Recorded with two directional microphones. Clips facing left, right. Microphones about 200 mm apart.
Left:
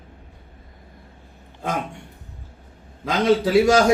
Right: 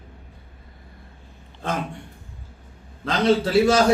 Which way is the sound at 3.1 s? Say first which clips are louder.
Left 1 dB; 10° left (ahead or behind).